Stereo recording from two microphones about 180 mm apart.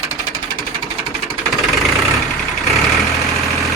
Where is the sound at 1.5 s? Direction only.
Centre (ahead or behind).